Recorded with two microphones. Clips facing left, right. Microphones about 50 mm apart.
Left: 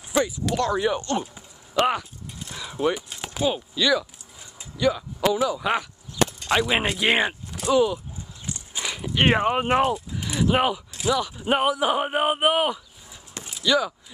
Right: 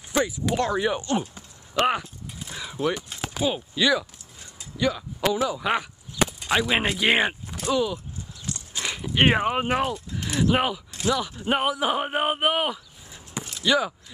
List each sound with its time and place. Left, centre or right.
0.2 s speech: centre
1.2 s a sound: centre
1.9 s a sound: centre
3.7 s speech: centre
4.7 s speech: centre
8.5 s horse: centre
8.8 s dog: centre
9.3 s speech: centre
13.4 s a sound: centre
13.7 s speech: centre